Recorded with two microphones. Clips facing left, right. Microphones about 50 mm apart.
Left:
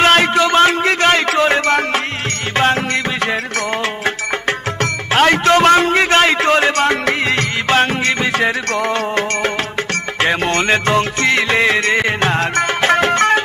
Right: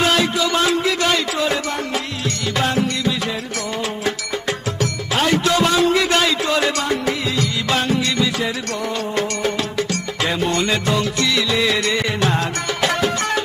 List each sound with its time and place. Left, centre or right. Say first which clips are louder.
0.0 s music: left 6 dB; left
5.1 s a sound: left 6 dB; left
7.7 s music: left 5 dB; left